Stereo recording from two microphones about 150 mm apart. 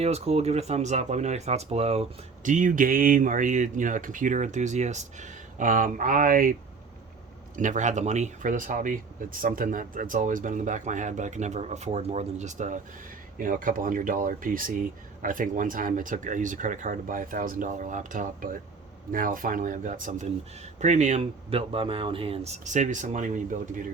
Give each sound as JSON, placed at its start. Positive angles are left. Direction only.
{"t": 0.0, "sound": "speech", "side_deg": -45}
{"t": 7.5, "sound": "speech", "side_deg": -55}